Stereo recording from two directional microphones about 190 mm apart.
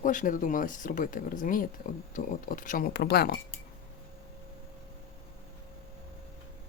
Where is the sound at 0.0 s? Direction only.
45° left (ahead or behind).